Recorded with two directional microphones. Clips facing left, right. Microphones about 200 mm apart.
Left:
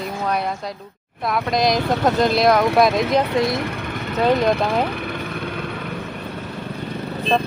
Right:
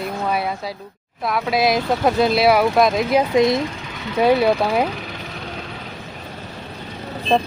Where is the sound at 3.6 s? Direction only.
60° left (ahead or behind).